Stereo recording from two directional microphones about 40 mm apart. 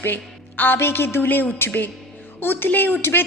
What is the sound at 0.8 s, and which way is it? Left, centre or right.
A woman's voice, left.